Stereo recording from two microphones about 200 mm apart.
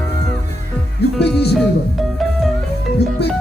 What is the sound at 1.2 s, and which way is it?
Speech, 55° left (ahead or behind).